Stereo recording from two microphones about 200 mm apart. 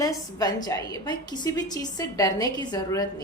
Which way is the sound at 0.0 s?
20° left (ahead or behind).